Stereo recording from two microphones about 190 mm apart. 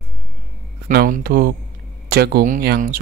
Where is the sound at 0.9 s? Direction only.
50° right (ahead or behind).